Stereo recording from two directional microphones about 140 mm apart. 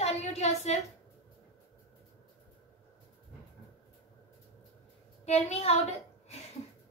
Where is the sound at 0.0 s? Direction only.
50° left (ahead or behind).